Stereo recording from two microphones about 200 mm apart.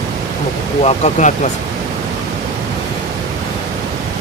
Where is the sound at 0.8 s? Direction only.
35° left (ahead or behind).